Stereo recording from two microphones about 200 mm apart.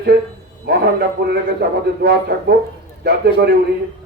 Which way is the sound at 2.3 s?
55° right (ahead or behind).